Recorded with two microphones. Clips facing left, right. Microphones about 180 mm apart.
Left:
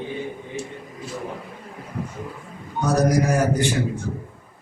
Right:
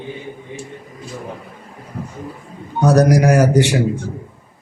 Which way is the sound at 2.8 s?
70° right (ahead or behind).